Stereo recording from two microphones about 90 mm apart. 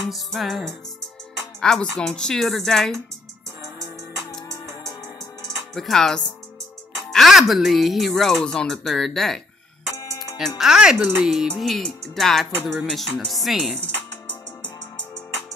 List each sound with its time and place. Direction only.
0.1 s music: centre (ahead or behind)
5.8 s music: 5° left (ahead or behind)
10.6 s music: 5° right (ahead or behind)